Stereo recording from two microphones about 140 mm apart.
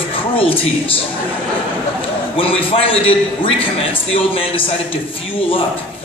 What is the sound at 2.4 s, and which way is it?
A man's voice, 40° left (ahead or behind).